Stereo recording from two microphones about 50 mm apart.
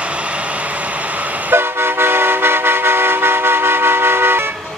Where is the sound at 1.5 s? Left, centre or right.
Right.